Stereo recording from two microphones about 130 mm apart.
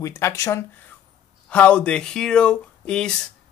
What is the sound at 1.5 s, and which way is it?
Speech, 10° left (ahead or behind).